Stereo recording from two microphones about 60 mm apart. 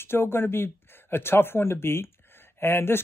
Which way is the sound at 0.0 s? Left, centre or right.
Left.